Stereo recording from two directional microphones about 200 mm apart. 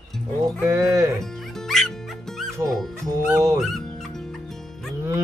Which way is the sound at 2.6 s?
Centre (ahead or behind).